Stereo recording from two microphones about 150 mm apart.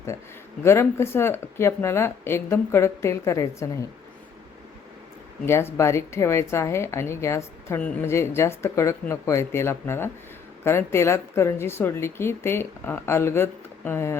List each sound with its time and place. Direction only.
0.6 s a woman's voice: 15° left (ahead or behind)
5.5 s a woman's voice: 15° left (ahead or behind)